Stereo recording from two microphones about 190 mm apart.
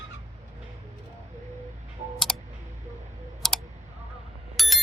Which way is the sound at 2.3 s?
5° left (ahead or behind).